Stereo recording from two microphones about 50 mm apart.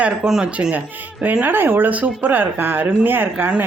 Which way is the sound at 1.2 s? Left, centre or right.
Right.